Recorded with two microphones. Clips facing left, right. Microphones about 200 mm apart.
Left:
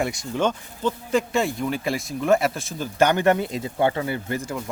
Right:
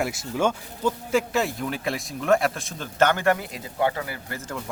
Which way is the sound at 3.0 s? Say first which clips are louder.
Left 2 dB; 15° left (ahead or behind).